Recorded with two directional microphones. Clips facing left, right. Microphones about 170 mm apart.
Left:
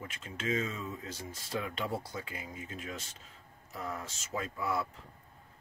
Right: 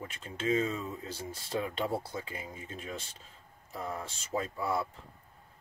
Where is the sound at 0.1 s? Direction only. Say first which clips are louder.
Right 4 dB; 30° right (ahead or behind).